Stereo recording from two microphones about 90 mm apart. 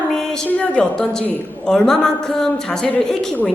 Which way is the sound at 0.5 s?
15° left (ahead or behind).